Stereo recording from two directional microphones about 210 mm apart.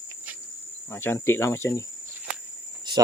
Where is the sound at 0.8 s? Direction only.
10° left (ahead or behind).